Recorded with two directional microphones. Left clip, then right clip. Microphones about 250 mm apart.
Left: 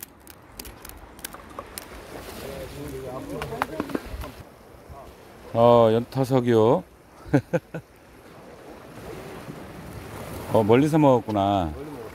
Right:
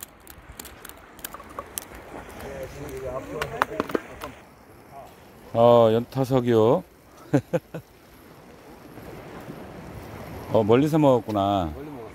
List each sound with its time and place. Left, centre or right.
3.3 s speech: right
5.5 s speech: centre
10.5 s speech: centre